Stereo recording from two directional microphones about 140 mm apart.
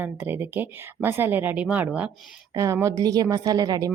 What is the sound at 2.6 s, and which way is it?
Speech, 20° right (ahead or behind).